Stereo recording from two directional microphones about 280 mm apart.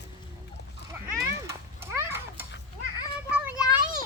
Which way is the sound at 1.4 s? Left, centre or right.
Centre.